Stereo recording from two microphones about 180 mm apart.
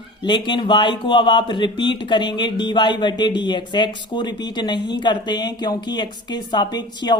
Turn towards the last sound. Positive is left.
turn(degrees=25)  # may be behind; listen again after turning